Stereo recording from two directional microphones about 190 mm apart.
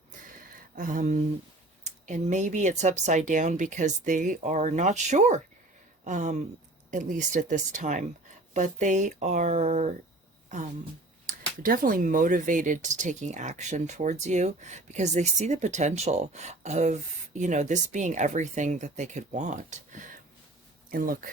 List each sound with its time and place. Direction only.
0.5 s speech: 45° right (ahead or behind)